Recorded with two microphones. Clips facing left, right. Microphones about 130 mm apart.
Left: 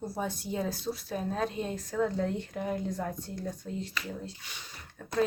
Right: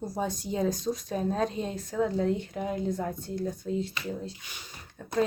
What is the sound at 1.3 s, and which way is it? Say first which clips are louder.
Speech: right 3 dB; 25° right (ahead or behind).